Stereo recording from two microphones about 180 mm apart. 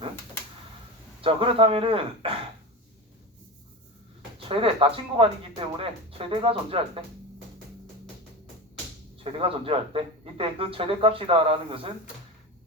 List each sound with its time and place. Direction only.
1.2 s speech: 30° right (ahead or behind)
4.4 s speech: 30° right (ahead or behind)
9.2 s speech: 30° right (ahead or behind)